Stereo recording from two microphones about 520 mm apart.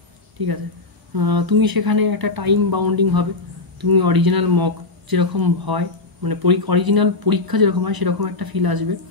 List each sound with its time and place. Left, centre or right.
0.4 s speech: right